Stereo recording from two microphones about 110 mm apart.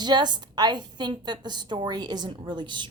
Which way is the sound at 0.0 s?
40° right (ahead or behind).